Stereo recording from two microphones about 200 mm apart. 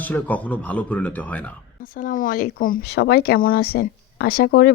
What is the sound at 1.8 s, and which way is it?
Speech, 45° left (ahead or behind).